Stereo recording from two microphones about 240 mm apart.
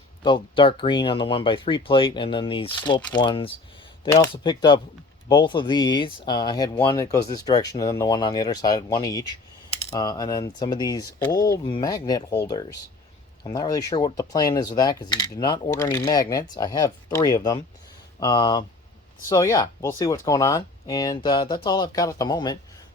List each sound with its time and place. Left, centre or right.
0.2 s speech: centre